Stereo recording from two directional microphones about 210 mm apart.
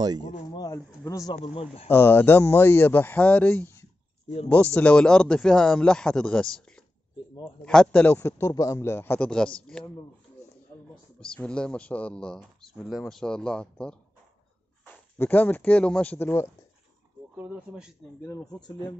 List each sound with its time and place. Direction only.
0.5 s speech: 15° left (ahead or behind)
1.3 s speech: 25° left (ahead or behind)
1.9 s a man's voice: 10° left (ahead or behind)
11.1 s speech: 5° left (ahead or behind)
17.4 s speech: 5° right (ahead or behind)
18.2 s a man's voice: 15° left (ahead or behind)